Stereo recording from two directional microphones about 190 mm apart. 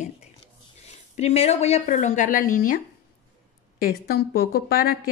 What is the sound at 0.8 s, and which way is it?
A woman's voice, 35° left (ahead or behind).